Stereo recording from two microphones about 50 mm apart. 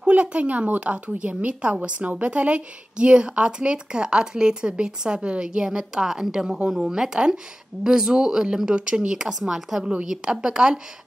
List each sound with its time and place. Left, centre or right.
0.0 s speech: right